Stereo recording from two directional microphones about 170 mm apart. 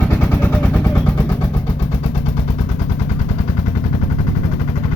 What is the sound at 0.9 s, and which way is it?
Vehicle, 15° left (ahead or behind).